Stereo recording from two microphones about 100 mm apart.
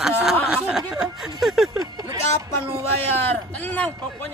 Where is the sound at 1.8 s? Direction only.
40° right (ahead or behind).